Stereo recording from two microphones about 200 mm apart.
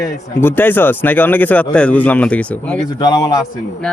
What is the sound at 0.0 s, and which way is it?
Speech, 10° left (ahead or behind).